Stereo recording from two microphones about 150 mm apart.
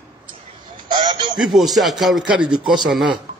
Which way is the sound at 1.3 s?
Centre (ahead or behind).